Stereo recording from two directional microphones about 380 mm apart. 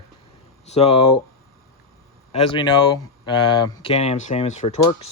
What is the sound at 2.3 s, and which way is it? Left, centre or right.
Speech, centre.